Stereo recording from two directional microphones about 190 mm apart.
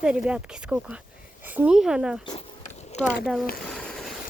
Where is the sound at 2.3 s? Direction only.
35° left (ahead or behind).